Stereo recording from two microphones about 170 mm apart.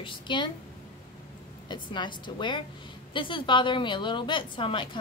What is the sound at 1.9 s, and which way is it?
A woman's voice, 25° left (ahead or behind).